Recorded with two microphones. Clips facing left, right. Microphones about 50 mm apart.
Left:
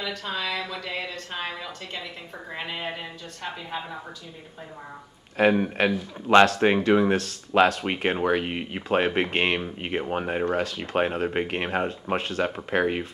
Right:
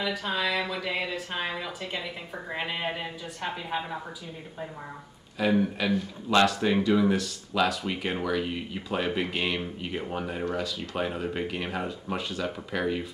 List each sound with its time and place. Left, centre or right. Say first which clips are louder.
0.0 s speech: right 2 dB; centre
5.4 s speech: left 4 dB; left